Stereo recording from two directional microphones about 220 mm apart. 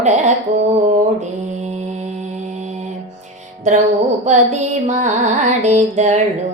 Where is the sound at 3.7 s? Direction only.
35° right (ahead or behind).